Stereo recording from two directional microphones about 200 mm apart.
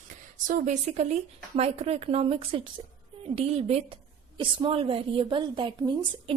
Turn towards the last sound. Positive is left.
turn(degrees=-25)  # may be behind; listen again after turning